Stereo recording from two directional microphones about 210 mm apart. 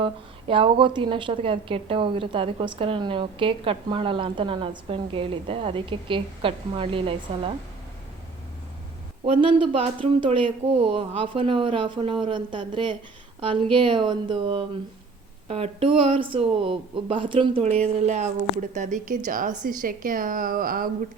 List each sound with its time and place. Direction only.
0.0 s a woman's voice: 25° right (ahead or behind)
9.2 s a woman's voice: 25° right (ahead or behind); by 20.9 s 40° right (ahead or behind)